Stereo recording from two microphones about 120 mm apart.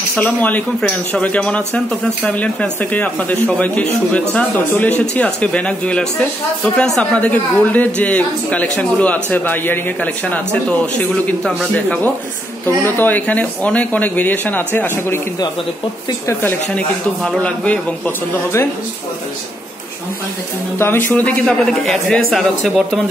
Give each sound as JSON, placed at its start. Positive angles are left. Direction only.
{"t": 0.2, "sound": "speech", "side_deg": 15}
{"t": 17.2, "sound": "speech", "side_deg": 5}
{"t": 20.7, "sound": "speech", "side_deg": 20}